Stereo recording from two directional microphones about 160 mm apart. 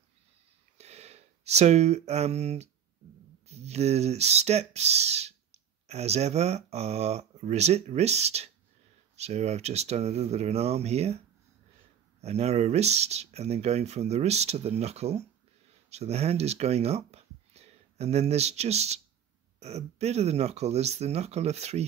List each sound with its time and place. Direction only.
0.7 s speech: 40° right (ahead or behind)